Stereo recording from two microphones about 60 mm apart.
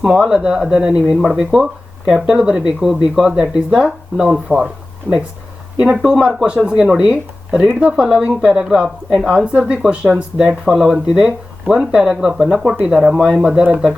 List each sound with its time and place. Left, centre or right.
0.0 s a woman's voice: centre
5.8 s a woman's voice: centre